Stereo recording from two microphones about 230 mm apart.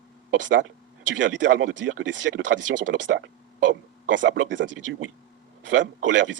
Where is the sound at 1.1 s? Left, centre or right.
Right.